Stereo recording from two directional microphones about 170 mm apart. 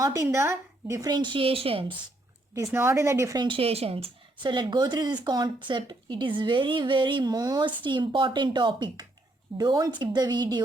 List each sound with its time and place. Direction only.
0.0 s a woman's voice: 20° right (ahead or behind); by 2.0 s 35° right (ahead or behind)
2.7 s a woman's voice: 15° right (ahead or behind)